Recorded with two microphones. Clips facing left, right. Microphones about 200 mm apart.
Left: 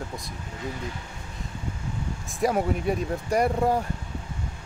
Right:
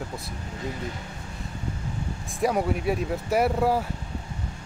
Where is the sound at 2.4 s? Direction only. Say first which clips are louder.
Even; centre (ahead or behind).